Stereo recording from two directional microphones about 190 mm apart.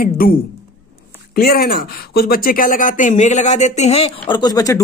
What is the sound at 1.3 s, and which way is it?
Speech, 50° left (ahead or behind).